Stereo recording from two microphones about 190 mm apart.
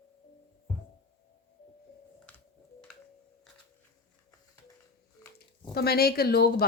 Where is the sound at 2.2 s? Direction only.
5° left (ahead or behind).